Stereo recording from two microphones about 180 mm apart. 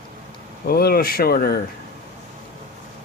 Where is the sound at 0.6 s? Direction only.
60° left (ahead or behind).